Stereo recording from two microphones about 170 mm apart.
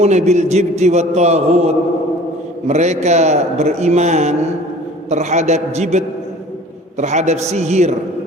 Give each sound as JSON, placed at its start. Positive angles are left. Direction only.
{"t": 0.0, "sound": "a man's voice", "side_deg": -40}
{"t": 7.0, "sound": "a man's voice", "side_deg": -45}